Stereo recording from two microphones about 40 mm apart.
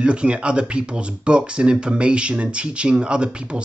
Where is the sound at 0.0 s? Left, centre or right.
Right.